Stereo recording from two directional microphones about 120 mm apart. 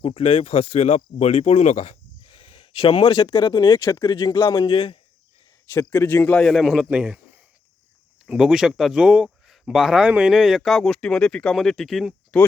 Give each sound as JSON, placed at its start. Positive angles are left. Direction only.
{"t": 0.0, "sound": "speech", "side_deg": 50}
{"t": 0.3, "sound": "speech", "side_deg": 65}
{"t": 2.7, "sound": "speech", "side_deg": 40}
{"t": 5.7, "sound": "speech", "side_deg": 20}
{"t": 6.4, "sound": "a man's voice", "side_deg": 0}
{"t": 8.3, "sound": "a man's voice", "side_deg": -5}